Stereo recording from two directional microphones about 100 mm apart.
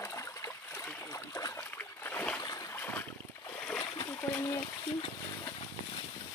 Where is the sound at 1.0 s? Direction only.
30° left (ahead or behind); by 2.4 s 15° left (ahead or behind).